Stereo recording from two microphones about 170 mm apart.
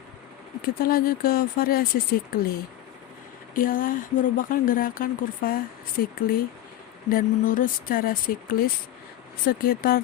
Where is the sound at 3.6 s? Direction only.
55° left (ahead or behind).